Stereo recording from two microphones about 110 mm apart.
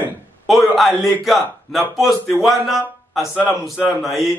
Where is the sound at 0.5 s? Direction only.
Centre (ahead or behind).